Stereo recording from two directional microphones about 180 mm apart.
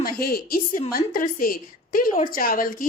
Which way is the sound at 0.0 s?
55° left (ahead or behind).